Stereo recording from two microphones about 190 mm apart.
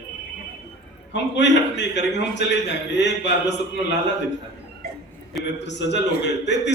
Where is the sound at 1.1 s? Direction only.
65° left (ahead or behind).